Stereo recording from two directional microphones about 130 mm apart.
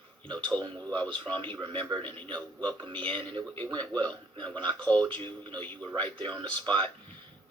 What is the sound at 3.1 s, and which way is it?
Speech, 35° right (ahead or behind).